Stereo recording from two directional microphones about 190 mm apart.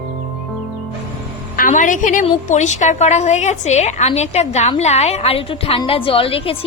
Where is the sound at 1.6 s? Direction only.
45° left (ahead or behind).